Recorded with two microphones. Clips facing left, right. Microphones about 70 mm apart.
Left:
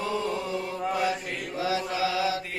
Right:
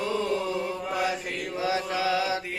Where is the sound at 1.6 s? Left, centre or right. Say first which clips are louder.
Even; right.